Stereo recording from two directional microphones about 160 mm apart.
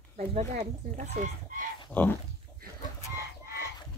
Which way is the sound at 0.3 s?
45° right (ahead or behind).